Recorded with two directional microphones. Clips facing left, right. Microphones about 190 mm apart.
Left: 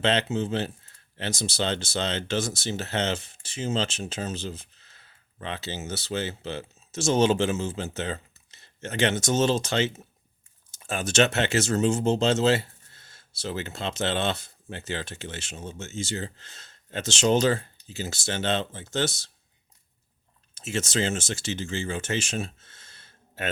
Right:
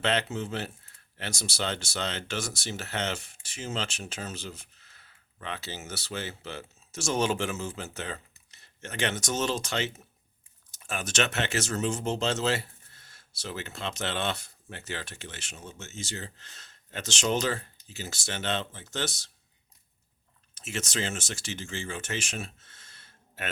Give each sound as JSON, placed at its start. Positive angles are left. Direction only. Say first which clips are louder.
{"t": 0.0, "sound": "speech", "louder": "left 4 dB", "side_deg": 25}
{"t": 20.6, "sound": "speech", "louder": "left 6 dB", "side_deg": 25}